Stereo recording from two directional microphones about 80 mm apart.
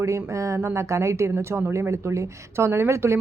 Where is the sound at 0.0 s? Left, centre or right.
Right.